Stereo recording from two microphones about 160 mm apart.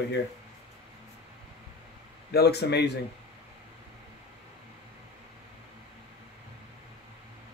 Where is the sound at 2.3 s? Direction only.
85° left.